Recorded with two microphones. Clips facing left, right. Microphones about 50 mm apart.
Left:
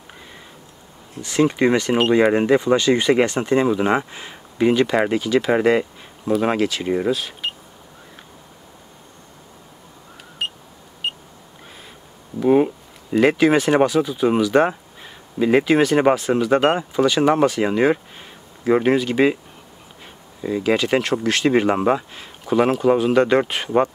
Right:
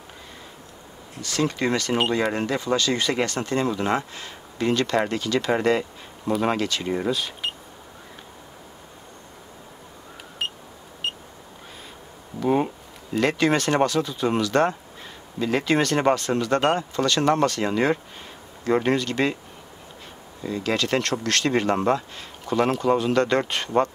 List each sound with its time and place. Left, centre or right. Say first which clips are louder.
1.2 s speech: left 7 dB; left; by 7.5 s centre
12.4 s speech: left 6 dB; centre
20.4 s speech: left 5 dB; centre